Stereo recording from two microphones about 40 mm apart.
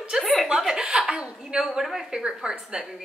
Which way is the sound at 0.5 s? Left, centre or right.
Centre.